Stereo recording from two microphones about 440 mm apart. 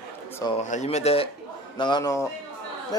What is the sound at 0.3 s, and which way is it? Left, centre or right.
A man's voice, centre.